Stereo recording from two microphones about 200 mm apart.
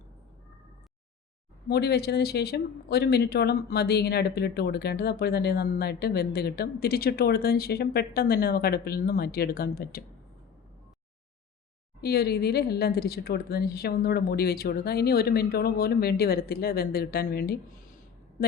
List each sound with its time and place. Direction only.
1.6 s speech: 55° left (ahead or behind)
12.0 s speech: 50° left (ahead or behind)